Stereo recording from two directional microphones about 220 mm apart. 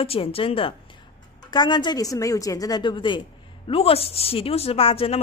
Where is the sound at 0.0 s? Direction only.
25° left (ahead or behind).